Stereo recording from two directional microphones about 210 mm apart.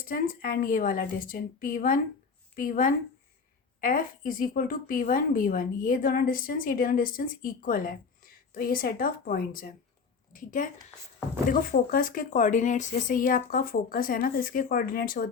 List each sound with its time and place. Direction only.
0.1 s a woman's voice: 45° left (ahead or behind)